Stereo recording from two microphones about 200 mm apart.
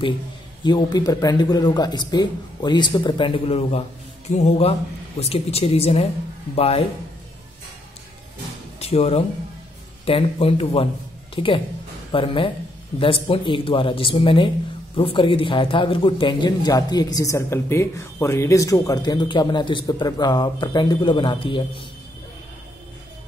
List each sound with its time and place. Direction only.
0.7 s speech: 20° left (ahead or behind)
8.7 s speech: 30° left (ahead or behind)